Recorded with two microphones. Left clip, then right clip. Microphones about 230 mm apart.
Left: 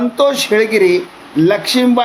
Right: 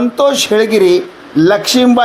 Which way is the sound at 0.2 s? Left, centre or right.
Centre.